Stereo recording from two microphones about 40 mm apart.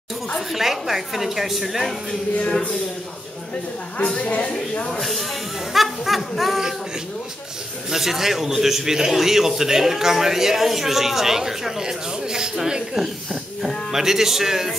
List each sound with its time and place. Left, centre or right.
0.5 s speech: centre
4.2 s a woman's voice: left
5.7 s speech: centre
7.9 s speech: centre